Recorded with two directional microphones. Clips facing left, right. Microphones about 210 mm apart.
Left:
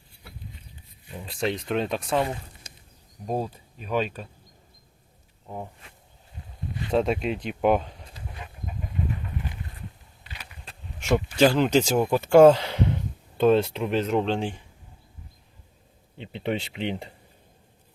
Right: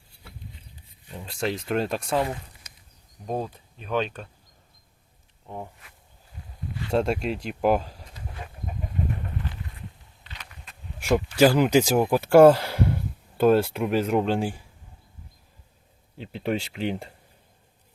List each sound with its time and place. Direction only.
1.2 s speech: centre (ahead or behind)
2.2 s a sound: 25° left (ahead or behind)
3.2 s speech: 5° left (ahead or behind)
6.9 s speech: centre (ahead or behind)
10.2 s a sound: 10° left (ahead or behind)
11.3 s speech: 10° right (ahead or behind)
16.1 s speech: centre (ahead or behind)